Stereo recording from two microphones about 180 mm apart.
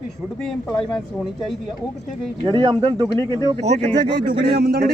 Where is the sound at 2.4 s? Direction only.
25° right (ahead or behind).